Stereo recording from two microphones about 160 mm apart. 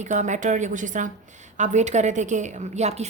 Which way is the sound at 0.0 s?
50° right (ahead or behind).